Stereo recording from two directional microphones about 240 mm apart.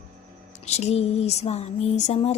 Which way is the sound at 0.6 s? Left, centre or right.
Left.